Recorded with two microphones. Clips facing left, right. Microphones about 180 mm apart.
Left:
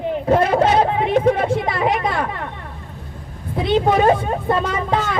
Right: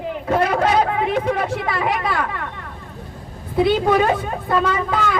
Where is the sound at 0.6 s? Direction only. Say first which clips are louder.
Left 2 dB; 25° left (ahead or behind).